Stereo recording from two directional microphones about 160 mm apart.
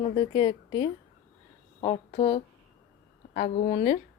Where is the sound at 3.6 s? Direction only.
40° left (ahead or behind).